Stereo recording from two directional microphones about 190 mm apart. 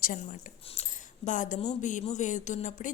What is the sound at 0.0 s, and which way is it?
A woman's voice, 45° left (ahead or behind).